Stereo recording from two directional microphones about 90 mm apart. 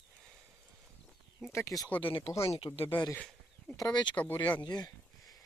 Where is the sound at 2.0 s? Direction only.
85° left.